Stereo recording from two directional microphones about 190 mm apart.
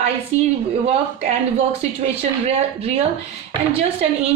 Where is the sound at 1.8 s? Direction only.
35° right (ahead or behind).